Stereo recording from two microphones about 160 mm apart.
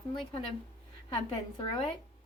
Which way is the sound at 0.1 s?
35° left (ahead or behind).